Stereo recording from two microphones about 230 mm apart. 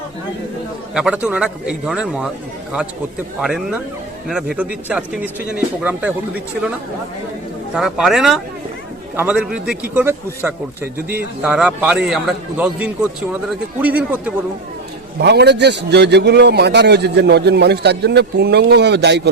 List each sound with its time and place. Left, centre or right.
0.9 s speech: centre
3.4 s speech: centre
7.8 s a man's voice: centre
15.2 s a man's voice: right